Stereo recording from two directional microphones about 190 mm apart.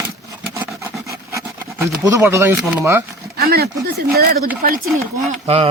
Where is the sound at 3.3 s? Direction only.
55° right (ahead or behind).